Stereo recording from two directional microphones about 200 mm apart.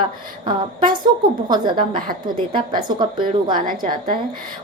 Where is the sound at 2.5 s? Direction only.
25° right (ahead or behind).